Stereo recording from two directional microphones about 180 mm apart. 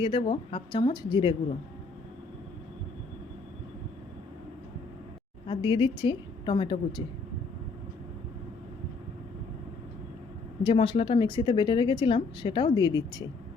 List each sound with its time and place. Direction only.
0.0 s speech: 30° left (ahead or behind)
5.5 s speech: 25° left (ahead or behind)
10.6 s speech: 30° left (ahead or behind)